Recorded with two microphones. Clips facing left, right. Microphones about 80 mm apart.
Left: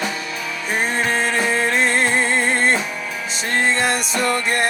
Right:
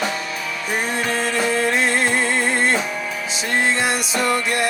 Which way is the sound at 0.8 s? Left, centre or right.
Left.